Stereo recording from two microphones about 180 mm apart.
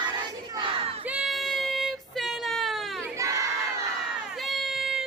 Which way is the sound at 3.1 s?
15° right (ahead or behind).